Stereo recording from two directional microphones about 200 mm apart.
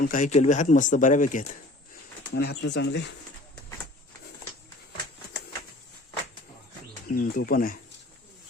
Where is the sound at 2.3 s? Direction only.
55° left (ahead or behind).